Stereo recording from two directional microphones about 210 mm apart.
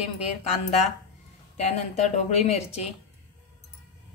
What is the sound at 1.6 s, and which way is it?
A woman's voice, 30° left (ahead or behind).